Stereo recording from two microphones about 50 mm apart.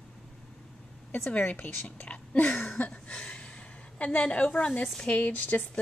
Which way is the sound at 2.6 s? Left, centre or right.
Left.